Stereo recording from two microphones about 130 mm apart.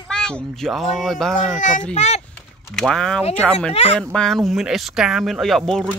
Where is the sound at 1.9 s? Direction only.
60° left (ahead or behind).